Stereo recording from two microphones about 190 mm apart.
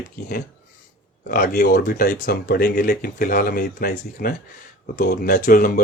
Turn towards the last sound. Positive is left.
turn(degrees=45)  # may be behind; listen again after turning